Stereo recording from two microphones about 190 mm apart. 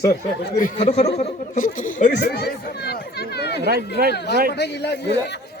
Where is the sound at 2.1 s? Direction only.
55° left (ahead or behind).